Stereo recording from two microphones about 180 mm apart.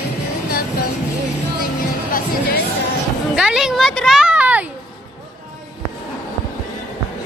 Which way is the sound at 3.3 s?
5° right (ahead or behind).